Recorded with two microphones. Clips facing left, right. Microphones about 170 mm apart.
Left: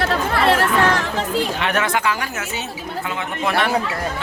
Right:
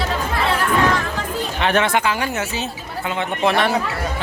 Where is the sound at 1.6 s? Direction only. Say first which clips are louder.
Right 2 dB; 30° right (ahead or behind).